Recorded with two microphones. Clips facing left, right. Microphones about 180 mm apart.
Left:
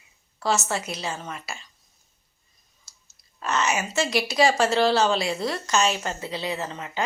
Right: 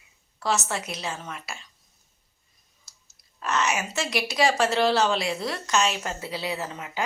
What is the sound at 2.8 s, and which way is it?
Speech, centre (ahead or behind).